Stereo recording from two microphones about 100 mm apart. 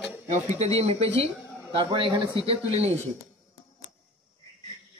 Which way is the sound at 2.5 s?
90° right.